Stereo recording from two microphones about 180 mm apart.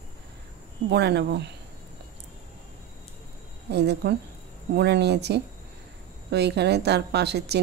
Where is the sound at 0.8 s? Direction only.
70° right (ahead or behind).